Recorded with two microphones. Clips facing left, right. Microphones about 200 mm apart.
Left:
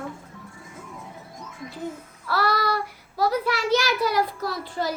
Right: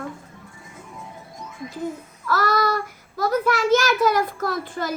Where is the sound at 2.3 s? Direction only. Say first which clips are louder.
Right 3 dB; 45° right (ahead or behind).